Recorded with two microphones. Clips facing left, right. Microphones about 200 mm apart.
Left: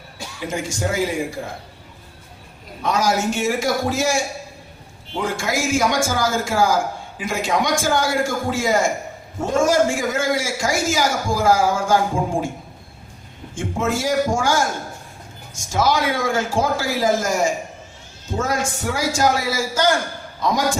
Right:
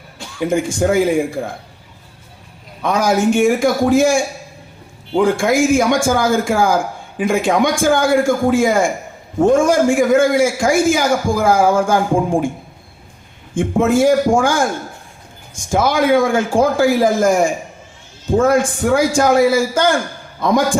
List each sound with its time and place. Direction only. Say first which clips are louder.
0.3 s speech: right 9 dB; 55° right (ahead or behind)
2.8 s a man's voice: right 5 dB; 55° right (ahead or behind)
13.5 s a man's voice: right 8 dB; 55° right (ahead or behind)